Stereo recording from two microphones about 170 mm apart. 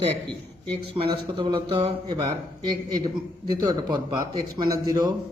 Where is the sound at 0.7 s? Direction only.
30° right (ahead or behind).